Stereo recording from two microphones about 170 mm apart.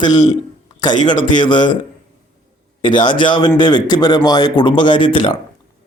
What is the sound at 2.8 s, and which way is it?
Speech, 30° left (ahead or behind).